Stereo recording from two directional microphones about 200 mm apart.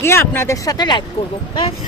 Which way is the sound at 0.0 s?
10° left (ahead or behind).